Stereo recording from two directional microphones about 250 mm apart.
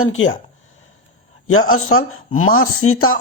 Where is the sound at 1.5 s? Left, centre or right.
Left.